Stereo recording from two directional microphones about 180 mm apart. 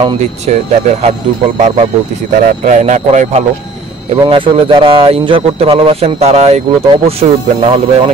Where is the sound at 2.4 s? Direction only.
45° right (ahead or behind).